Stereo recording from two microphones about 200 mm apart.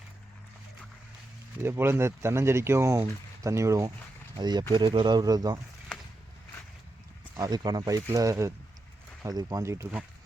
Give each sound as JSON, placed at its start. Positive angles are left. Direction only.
{"t": 1.6, "sound": "speech", "side_deg": -10}
{"t": 7.3, "sound": "speech", "side_deg": -20}